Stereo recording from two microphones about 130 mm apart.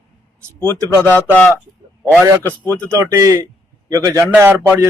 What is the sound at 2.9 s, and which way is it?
Speech, 20° right (ahead or behind).